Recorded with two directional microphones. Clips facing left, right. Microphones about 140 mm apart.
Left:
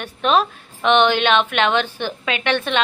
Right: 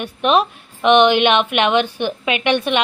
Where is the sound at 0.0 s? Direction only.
15° right (ahead or behind).